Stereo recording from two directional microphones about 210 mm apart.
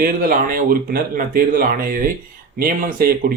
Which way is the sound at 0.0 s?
40° right (ahead or behind).